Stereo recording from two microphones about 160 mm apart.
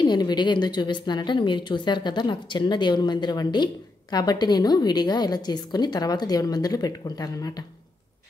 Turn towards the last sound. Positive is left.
turn(degrees=20)  # may be behind; listen again after turning